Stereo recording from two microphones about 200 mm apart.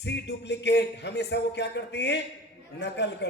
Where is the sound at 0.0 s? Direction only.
60° left (ahead or behind).